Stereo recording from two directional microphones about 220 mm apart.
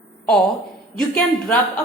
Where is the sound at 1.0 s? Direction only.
5° left (ahead or behind).